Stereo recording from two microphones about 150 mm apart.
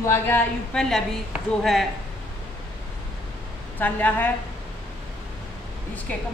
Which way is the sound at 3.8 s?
10° left (ahead or behind).